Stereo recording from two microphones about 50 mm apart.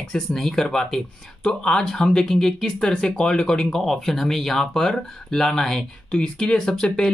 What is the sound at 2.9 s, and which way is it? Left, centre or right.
Speech, centre.